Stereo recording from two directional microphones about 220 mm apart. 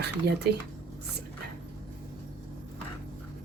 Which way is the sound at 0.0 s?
50° right (ahead or behind).